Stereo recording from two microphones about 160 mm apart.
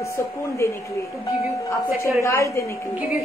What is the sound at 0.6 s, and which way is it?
Speech, 15° left (ahead or behind).